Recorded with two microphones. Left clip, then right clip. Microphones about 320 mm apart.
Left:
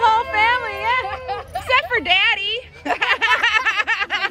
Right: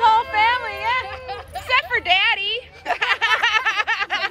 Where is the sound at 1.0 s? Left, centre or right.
Left.